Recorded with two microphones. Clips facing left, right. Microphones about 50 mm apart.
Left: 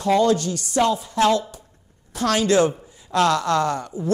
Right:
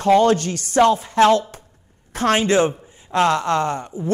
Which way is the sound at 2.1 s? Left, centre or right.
Right.